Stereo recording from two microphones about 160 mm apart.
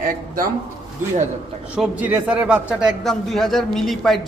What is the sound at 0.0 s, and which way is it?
Speech, 60° right (ahead or behind).